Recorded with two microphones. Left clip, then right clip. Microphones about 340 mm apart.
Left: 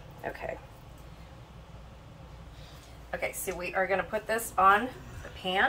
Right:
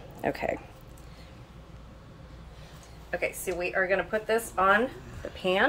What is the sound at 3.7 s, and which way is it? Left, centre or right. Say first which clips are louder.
Speech: right 1 dB; centre.